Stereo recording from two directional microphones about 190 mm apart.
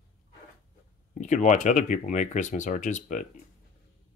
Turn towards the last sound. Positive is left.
turn(degrees=40)  # may be behind; listen again after turning